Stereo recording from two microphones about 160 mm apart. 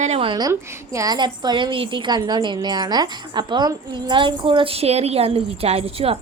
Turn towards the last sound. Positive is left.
turn(degrees=-40)  # may be behind; listen again after turning